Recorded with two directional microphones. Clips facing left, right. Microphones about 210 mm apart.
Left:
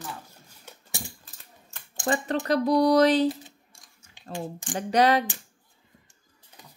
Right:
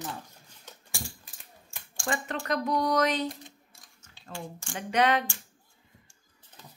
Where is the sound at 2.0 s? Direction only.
35° left (ahead or behind).